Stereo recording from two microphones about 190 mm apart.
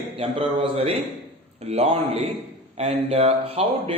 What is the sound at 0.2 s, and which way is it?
A man's voice, 30° right (ahead or behind).